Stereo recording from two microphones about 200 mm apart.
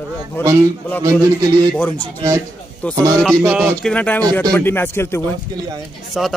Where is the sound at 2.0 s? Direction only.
20° right (ahead or behind).